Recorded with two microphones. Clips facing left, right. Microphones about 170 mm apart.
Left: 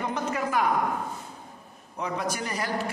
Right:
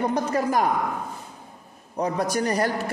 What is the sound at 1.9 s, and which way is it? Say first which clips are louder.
Speech: right 6 dB; 40° right (ahead or behind).